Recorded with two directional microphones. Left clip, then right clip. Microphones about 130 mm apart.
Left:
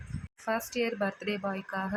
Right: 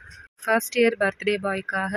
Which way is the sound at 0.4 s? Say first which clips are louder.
Right 10 dB; 45° right (ahead or behind).